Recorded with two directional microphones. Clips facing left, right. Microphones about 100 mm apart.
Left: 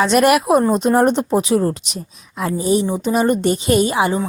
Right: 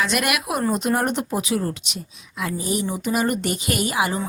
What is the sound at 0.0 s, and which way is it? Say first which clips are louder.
Speech: left 10 dB; 35° left (ahead or behind).